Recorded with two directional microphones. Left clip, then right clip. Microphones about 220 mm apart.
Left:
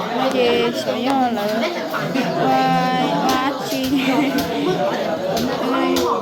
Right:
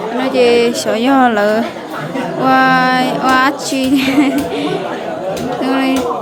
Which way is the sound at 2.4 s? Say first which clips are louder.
Right 8 dB; 25° right (ahead or behind).